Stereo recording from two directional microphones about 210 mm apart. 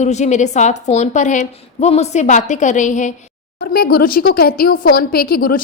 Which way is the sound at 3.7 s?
45° left (ahead or behind).